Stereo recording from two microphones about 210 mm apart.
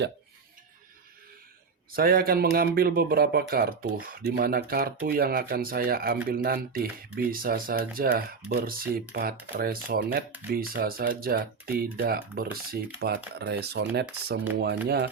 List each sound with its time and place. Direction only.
1.9 s speech: 45° right (ahead or behind)